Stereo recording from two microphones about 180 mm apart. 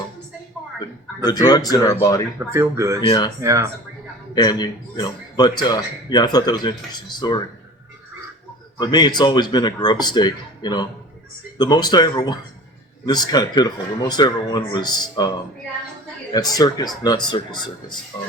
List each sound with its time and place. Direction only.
1.2 s speech: 20° left (ahead or behind)
2.4 s speech: 15° right (ahead or behind)
3.0 s speech: 25° left (ahead or behind)
3.4 s speech: 20° right (ahead or behind)
4.4 s speech: 25° left (ahead or behind)
8.8 s speech: 25° left (ahead or behind)
16.3 s speech: 20° left (ahead or behind)